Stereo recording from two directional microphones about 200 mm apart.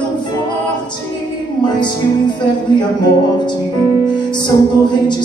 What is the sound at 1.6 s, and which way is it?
Music, 20° left (ahead or behind).